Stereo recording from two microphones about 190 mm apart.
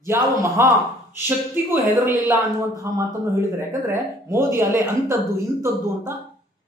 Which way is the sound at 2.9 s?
15° right (ahead or behind).